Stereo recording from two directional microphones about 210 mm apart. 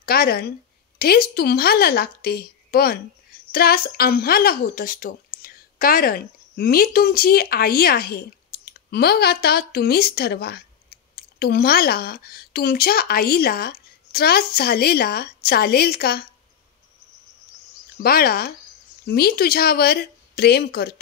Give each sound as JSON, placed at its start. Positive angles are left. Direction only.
{"t": 0.0, "sound": "a woman's voice", "side_deg": 45}
{"t": 18.0, "sound": "a woman's voice", "side_deg": 45}